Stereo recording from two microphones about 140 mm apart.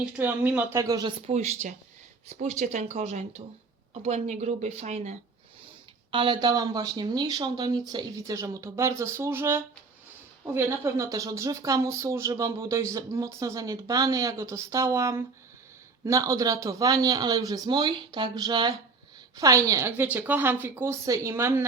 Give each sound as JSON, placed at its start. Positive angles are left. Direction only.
{"t": 0.2, "sound": "speech", "side_deg": -10}
{"t": 0.8, "sound": "speech", "side_deg": -25}
{"t": 1.3, "sound": "speech", "side_deg": -55}
{"t": 6.1, "sound": "speech", "side_deg": -35}